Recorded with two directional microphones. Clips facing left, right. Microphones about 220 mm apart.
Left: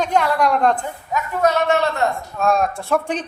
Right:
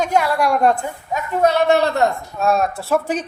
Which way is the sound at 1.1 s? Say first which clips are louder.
Right 2 dB; 30° right (ahead or behind).